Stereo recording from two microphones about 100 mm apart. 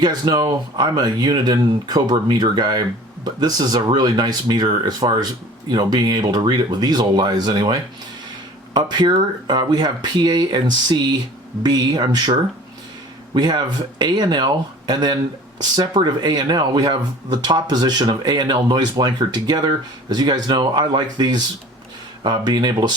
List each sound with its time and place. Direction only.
0.0 s speech: 45° right (ahead or behind)